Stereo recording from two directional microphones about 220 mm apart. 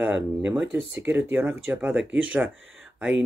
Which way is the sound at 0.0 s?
5° right (ahead or behind).